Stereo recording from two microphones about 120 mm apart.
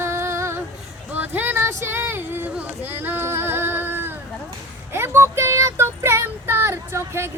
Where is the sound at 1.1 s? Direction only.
15° right (ahead or behind).